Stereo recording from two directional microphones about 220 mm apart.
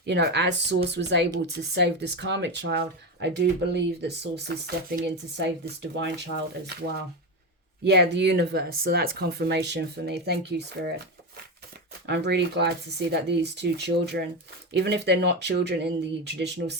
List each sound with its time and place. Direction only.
0.0 s speech: 50° right (ahead or behind)
7.9 s speech: 50° right (ahead or behind)
12.0 s speech: 50° right (ahead or behind)